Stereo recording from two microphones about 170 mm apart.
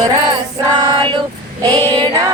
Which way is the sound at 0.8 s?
25° right (ahead or behind).